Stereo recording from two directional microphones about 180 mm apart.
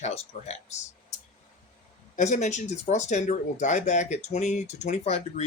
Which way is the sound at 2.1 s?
40° left (ahead or behind).